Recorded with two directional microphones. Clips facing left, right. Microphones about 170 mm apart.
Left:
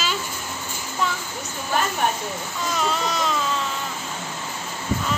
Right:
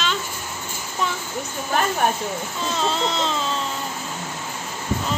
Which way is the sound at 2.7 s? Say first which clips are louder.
Right 1 dB; 25° right (ahead or behind).